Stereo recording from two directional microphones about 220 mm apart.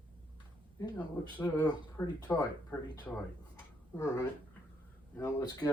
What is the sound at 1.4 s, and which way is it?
Speech, 20° left (ahead or behind).